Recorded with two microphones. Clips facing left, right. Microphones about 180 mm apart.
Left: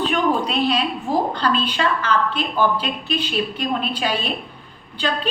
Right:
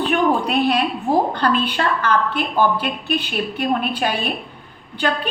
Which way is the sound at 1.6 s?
55° right (ahead or behind).